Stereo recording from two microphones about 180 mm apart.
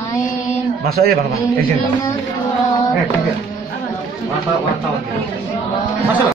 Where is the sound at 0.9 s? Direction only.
60° right (ahead or behind).